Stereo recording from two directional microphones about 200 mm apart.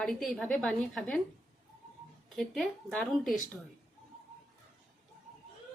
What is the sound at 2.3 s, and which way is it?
A woman's voice, centre (ahead or behind).